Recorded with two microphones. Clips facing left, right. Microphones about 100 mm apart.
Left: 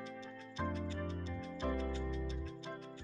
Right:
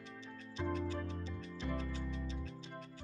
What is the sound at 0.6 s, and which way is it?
Music, 55° left (ahead or behind).